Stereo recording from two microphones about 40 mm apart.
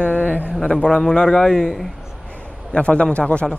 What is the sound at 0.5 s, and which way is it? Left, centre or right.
A man's voice, centre.